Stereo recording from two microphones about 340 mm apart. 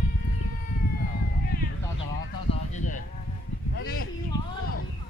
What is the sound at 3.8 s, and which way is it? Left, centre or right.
Speech, left.